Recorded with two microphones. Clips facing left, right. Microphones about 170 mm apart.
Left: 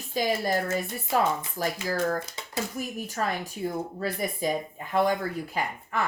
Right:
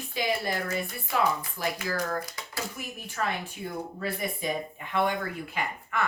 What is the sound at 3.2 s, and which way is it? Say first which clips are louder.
A woman's voice: left 2 dB; 30° left (ahead or behind).